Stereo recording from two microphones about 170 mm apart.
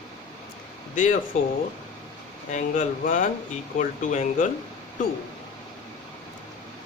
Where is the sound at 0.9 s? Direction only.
50° left (ahead or behind).